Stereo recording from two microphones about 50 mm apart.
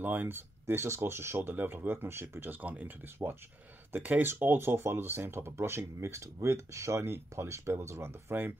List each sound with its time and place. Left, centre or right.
0.0 s speech: right
0.8 s speech: right
1.5 s speech: right
2.6 s speech: right
3.2 s speech: right
3.9 s speech: right
4.2 s speech: right
8.3 s speech: right